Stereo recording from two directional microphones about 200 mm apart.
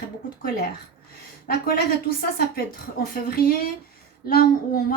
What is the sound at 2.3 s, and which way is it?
A woman's voice, 45° left (ahead or behind).